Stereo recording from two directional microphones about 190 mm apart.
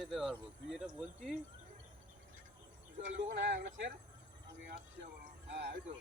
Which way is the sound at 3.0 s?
60° right (ahead or behind).